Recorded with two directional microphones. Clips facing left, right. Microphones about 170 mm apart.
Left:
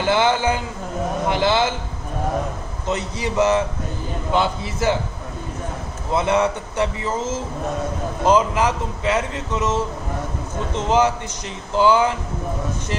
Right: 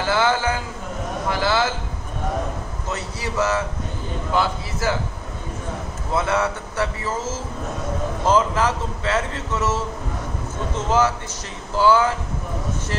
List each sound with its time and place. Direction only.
0.0 s speech: 20° left (ahead or behind)
2.9 s speech: 20° left (ahead or behind)
6.1 s a man's voice: 20° left (ahead or behind)